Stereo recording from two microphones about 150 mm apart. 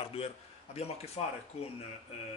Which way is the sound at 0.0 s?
40° left (ahead or behind).